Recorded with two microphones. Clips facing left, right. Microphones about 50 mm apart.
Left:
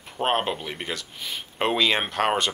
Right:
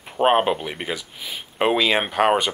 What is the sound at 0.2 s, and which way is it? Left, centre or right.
Speech, centre.